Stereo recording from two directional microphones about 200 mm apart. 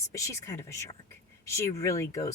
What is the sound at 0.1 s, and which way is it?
Speech, 15° left (ahead or behind).